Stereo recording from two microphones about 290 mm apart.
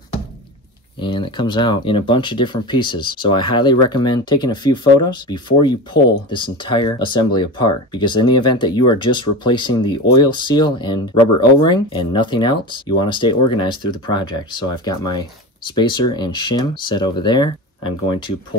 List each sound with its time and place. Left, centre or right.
1.0 s speech: centre
15.7 s speech: centre